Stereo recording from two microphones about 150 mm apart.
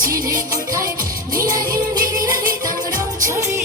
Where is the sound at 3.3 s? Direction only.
20° right (ahead or behind).